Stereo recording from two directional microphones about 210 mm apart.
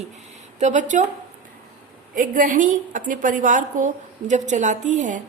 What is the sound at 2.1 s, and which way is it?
A woman's voice, 40° right (ahead or behind).